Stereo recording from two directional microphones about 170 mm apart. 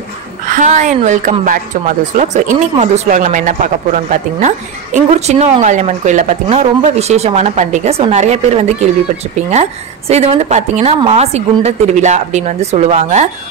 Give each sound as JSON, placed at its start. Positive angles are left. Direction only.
{"t": 0.5, "sound": "a woman's voice", "side_deg": -45}